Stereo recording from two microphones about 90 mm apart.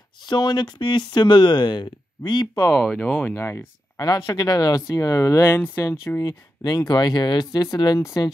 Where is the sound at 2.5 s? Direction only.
25° left (ahead or behind).